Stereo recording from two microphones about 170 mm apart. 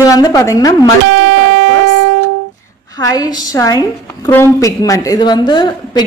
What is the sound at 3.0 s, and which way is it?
A woman's voice, 20° left (ahead or behind).